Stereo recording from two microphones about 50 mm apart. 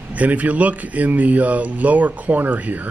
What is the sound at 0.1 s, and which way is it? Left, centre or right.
Speech, right.